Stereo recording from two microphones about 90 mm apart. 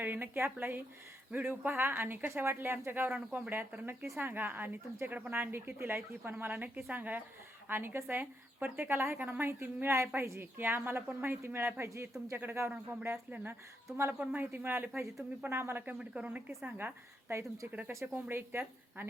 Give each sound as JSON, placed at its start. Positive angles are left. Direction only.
{"t": 0.0, "sound": "speech", "side_deg": -20}
{"t": 16.0, "sound": "speech", "side_deg": -15}